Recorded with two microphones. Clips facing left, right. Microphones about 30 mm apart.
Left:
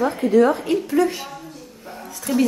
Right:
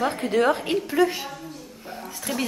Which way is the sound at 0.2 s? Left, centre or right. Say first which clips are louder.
Left 7 dB; right.